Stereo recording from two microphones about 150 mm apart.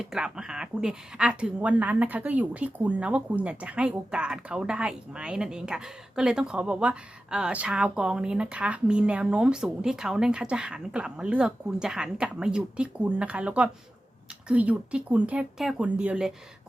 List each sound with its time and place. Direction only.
0.0 s speech: 5° right (ahead or behind)